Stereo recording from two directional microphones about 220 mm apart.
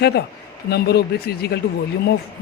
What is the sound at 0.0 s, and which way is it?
Speech, 50° left (ahead or behind).